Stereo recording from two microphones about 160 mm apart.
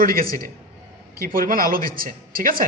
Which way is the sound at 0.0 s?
65° right (ahead or behind).